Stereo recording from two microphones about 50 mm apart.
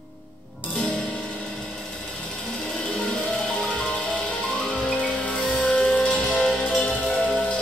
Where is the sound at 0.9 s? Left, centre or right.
Left.